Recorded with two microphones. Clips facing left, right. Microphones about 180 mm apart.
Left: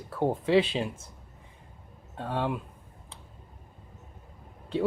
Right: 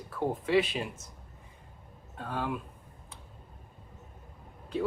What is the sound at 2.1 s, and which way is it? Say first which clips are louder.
Speech: left 4 dB; 30° left (ahead or behind).